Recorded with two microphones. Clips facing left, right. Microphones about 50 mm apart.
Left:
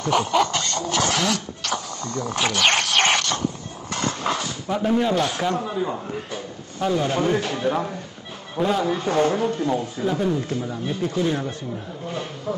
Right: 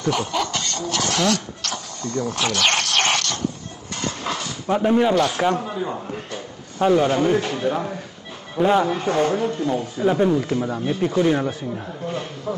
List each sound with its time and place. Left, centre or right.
0.3 s a sound: centre
1.0 s a sound: centre
4.2 s dog: centre
4.6 s speech: centre
6.8 s speech: right
7.2 s speech: centre
10.0 s speech: right
12.1 s speech: centre